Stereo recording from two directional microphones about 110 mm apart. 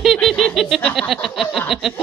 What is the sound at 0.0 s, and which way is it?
Laughter, centre (ahead or behind).